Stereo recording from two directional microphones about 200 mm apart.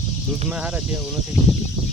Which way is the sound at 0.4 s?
5° right (ahead or behind).